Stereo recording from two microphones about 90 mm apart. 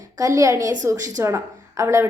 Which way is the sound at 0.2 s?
40° right (ahead or behind).